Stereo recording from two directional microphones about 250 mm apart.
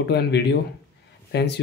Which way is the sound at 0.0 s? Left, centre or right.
Left.